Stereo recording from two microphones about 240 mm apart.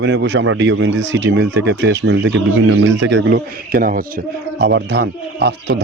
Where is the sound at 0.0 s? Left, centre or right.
Right.